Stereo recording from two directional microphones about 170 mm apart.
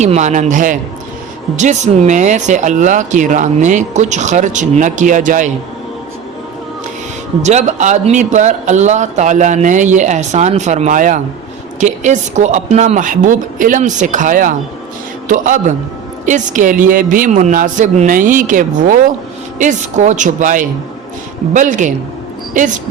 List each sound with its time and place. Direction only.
0.0 s speech: 40° right (ahead or behind)
7.4 s speech: 45° right (ahead or behind)